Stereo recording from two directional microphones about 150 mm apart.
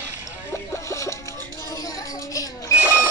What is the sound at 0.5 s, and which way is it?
Music, 20° left (ahead or behind).